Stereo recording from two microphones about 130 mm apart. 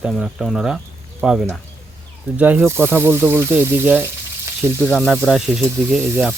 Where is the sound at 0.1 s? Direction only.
Centre (ahead or behind).